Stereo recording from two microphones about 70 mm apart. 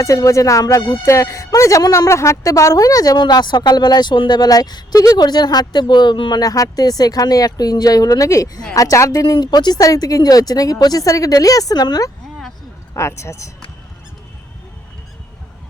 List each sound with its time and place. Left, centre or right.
0.0 s speech: left
9.8 s speech: left
13.0 s speech: left